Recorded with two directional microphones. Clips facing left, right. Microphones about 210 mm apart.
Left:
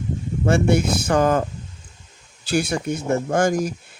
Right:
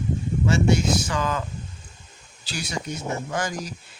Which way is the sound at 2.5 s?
55° left (ahead or behind).